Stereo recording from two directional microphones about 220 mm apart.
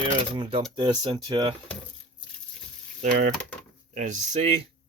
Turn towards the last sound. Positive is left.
turn(degrees=-30)  # may be behind; listen again after turning